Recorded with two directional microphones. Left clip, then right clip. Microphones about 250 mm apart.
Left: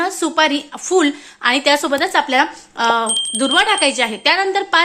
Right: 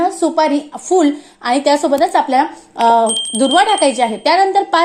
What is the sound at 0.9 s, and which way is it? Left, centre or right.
A woman's voice, centre.